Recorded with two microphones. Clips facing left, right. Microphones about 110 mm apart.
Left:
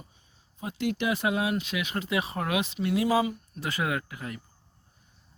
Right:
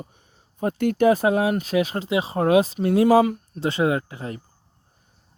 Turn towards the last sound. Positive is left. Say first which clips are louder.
# right 6 dB
turn(degrees=-30)  # may be behind; listen again after turning